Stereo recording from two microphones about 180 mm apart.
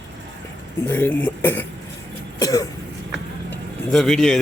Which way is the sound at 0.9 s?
10° left (ahead or behind).